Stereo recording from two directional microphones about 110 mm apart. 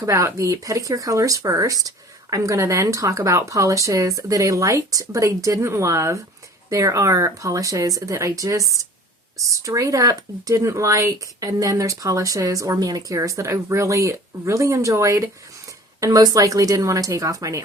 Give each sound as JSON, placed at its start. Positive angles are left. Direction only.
{"t": 0.0, "sound": "speech", "side_deg": -30}